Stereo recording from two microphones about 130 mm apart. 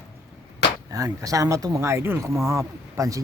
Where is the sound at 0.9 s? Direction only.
25° right (ahead or behind).